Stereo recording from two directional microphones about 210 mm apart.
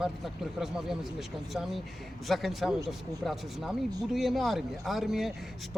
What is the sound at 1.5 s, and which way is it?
Speech, centre (ahead or behind).